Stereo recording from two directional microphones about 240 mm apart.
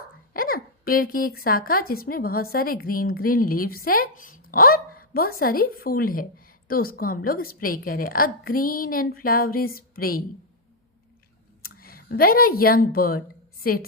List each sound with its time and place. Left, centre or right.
0.3 s a woman's voice: left
11.6 s a woman's voice: left